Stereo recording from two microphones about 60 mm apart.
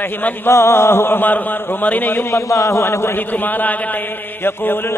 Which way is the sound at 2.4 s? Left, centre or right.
Left.